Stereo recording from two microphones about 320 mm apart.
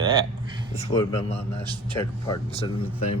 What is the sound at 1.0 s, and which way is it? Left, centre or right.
Speech, centre.